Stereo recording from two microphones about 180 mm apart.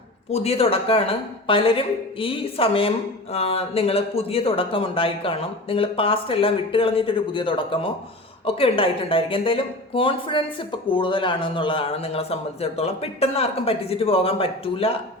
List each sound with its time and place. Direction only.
0.3 s a woman's voice: 35° left (ahead or behind)